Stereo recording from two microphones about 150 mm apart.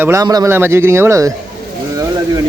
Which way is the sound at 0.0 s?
20° right (ahead or behind).